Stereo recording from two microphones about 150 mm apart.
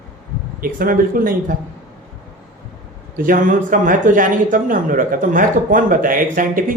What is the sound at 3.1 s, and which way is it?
Speech, 65° right (ahead or behind).